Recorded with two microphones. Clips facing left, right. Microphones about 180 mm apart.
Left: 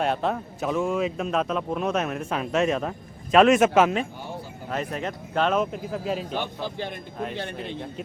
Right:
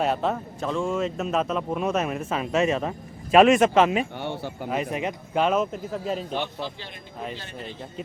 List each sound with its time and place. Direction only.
0.0 s speech: centre (ahead or behind)
4.2 s speech: 70° right (ahead or behind)
4.7 s speech: 10° right (ahead or behind)
5.7 s speech: 5° left (ahead or behind)
6.3 s a man's voice: 45° left (ahead or behind)